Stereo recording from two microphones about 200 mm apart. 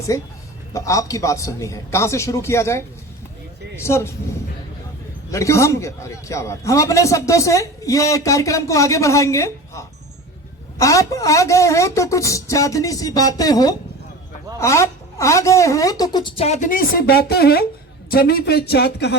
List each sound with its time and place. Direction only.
0.7 s a man's voice: 15° left (ahead or behind); by 19.1 s 55° left (ahead or behind)